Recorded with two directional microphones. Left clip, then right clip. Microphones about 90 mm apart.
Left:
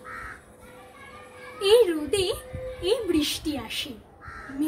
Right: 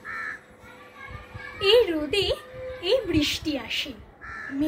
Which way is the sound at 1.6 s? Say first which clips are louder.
Even; 45° left (ahead or behind).